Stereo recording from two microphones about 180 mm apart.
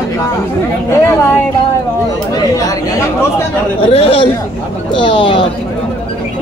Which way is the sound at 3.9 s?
30° left (ahead or behind).